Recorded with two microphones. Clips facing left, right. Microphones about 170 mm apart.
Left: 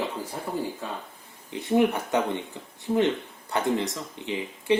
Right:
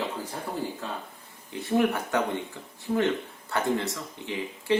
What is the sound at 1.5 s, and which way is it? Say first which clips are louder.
Speech: left 2 dB; 20° left (ahead or behind).